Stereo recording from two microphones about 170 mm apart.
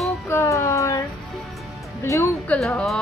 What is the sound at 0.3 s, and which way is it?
Child singing, 15° left (ahead or behind).